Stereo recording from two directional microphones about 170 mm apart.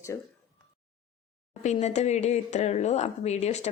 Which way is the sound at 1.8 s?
40° left (ahead or behind).